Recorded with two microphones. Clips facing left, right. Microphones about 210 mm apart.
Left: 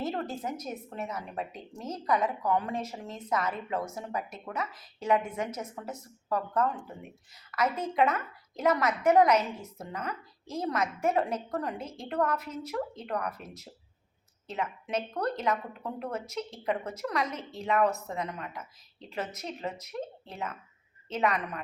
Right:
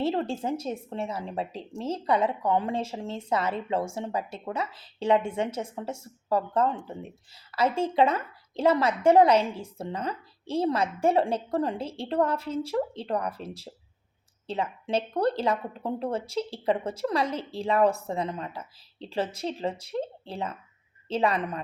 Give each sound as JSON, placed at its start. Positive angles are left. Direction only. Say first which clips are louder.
{"t": 0.0, "sound": "a woman's voice", "louder": "right 6 dB", "side_deg": -30}